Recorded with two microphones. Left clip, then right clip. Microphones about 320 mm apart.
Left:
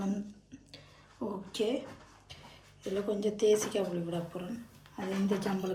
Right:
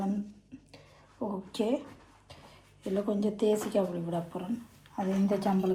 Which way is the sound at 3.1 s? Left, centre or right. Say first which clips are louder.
Left 2 dB; centre.